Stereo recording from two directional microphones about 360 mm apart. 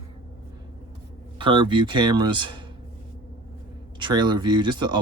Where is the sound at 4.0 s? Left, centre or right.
Centre.